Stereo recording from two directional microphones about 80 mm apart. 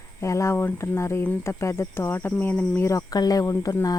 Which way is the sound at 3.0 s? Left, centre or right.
Left.